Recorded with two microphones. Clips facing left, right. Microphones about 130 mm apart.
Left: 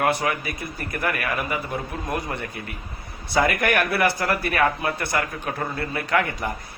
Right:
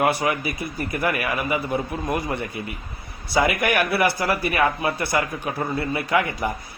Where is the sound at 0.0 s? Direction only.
5° right (ahead or behind).